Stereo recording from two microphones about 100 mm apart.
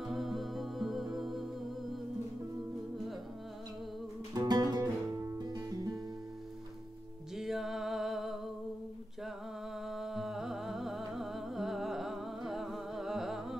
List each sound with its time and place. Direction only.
0.0 s music: centre (ahead or behind)
4.3 s music: 40° right (ahead or behind)
7.3 s music: 5° right (ahead or behind)
9.8 s music: 5° right (ahead or behind)